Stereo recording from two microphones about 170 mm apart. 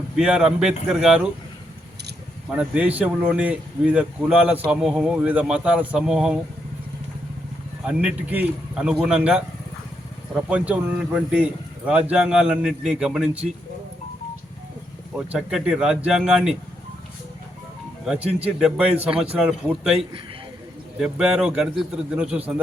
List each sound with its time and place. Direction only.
0.2 s speech: 5° right (ahead or behind)
2.5 s speech: 5° right (ahead or behind)
7.9 s speech: 10° right (ahead or behind)
10.5 s speech: 5° right (ahead or behind)
15.1 s speech: 5° right (ahead or behind)
18.0 s a man's voice: 5° right (ahead or behind)
19.1 s a man's voice: 35° right (ahead or behind)
19.4 s a man's voice: 5° right (ahead or behind)